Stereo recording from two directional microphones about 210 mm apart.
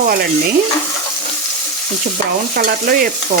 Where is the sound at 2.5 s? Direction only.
45° right (ahead or behind).